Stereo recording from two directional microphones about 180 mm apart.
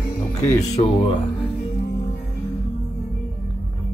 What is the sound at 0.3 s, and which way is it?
Speech, 20° left (ahead or behind).